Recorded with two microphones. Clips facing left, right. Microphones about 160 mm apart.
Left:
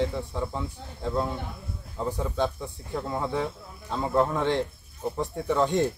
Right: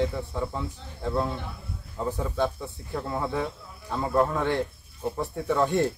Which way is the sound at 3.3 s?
20° left (ahead or behind).